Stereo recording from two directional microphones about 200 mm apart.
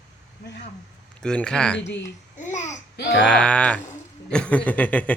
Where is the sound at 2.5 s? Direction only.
35° left (ahead or behind).